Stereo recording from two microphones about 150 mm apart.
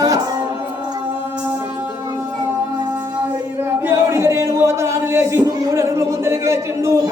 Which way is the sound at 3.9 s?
20° right (ahead or behind).